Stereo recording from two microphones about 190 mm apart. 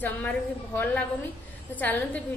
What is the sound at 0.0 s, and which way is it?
A woman's voice, 10° left (ahead or behind).